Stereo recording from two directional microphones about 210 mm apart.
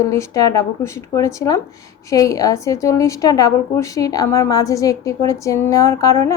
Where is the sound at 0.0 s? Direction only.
15° left (ahead or behind).